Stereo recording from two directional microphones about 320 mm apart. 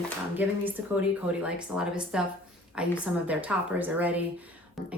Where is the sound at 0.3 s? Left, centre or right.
Centre.